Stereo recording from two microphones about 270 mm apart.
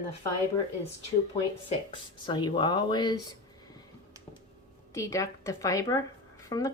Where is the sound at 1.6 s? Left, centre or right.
Centre.